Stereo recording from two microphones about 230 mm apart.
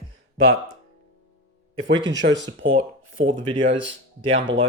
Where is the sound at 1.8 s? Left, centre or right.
Right.